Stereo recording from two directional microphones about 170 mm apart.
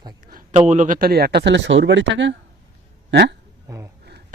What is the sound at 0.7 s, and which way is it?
Speech, 50° right (ahead or behind).